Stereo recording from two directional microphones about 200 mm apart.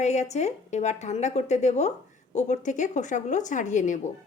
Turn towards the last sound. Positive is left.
turn(degrees=40)  # may be behind; listen again after turning